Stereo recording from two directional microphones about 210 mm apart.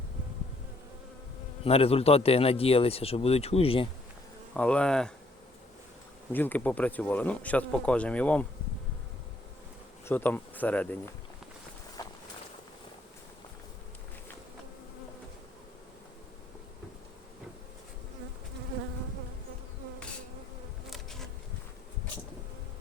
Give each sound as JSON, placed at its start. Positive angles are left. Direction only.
{"t": 1.6, "sound": "a man's voice", "side_deg": 30}
{"t": 4.5, "sound": "speech", "side_deg": 5}
{"t": 6.3, "sound": "speech", "side_deg": 10}
{"t": 10.1, "sound": "speech", "side_deg": 10}
{"t": 12.0, "sound": "walk", "side_deg": 20}
{"t": 20.9, "sound": "bee", "side_deg": 0}